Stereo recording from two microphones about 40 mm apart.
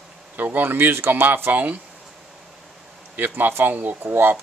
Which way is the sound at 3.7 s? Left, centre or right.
Right.